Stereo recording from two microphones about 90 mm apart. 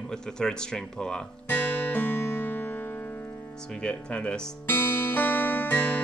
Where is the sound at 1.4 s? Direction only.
20° left (ahead or behind).